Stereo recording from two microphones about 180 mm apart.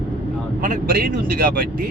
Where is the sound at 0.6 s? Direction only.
55° right (ahead or behind).